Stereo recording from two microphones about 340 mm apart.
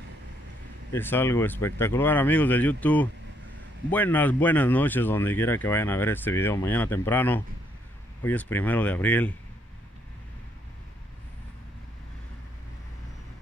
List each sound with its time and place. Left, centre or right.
0.9 s speech: centre